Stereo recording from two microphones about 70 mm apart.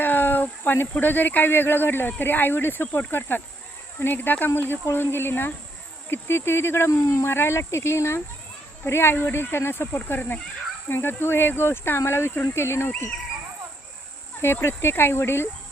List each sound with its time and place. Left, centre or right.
0.0 s speech: left
14.4 s speech: left